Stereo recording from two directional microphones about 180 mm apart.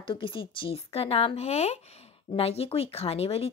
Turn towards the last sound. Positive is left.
turn(degrees=35)  # may be behind; listen again after turning